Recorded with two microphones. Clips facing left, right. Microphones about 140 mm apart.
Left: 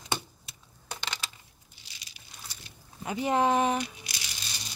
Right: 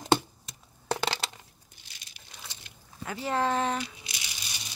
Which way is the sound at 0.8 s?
75° right (ahead or behind).